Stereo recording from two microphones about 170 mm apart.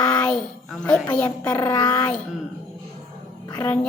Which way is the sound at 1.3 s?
20° left (ahead or behind).